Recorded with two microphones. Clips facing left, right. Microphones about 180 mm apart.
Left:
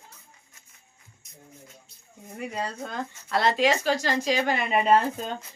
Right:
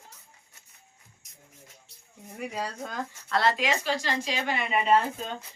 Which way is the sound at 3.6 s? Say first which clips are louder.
Left 5 dB; 40° left (ahead or behind).